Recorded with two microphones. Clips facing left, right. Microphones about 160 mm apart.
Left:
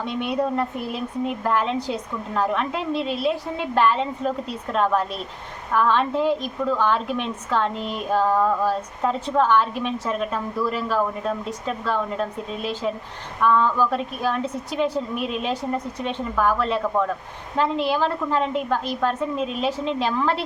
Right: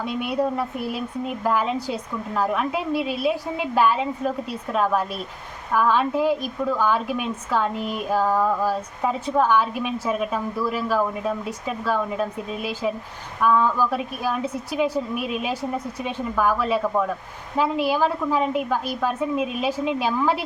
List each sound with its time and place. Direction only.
0.0 s a woman's voice: 5° right (ahead or behind)